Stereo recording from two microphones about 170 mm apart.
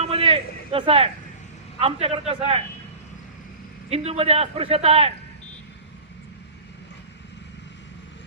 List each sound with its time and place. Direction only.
0.0 s a sound: 35° right (ahead or behind)
1.8 s a man's voice: 35° right (ahead or behind)
3.8 s a man's voice: 35° right (ahead or behind)